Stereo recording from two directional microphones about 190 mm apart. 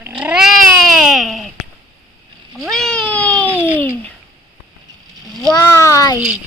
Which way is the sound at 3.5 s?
10° right (ahead or behind).